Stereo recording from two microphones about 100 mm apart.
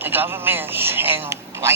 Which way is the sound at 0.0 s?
20° right (ahead or behind).